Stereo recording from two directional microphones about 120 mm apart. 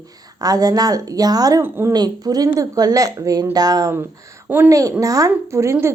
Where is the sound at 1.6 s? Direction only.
20° right (ahead or behind).